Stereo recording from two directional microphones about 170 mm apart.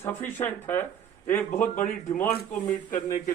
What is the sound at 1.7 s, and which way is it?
Speech, 45° left (ahead or behind).